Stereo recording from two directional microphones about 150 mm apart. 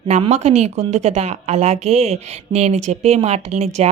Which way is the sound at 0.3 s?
45° right (ahead or behind).